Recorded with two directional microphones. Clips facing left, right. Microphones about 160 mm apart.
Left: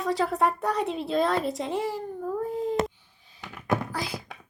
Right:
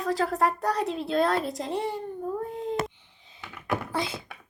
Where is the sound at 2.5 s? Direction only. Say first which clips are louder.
Left 3 dB; centre (ahead or behind).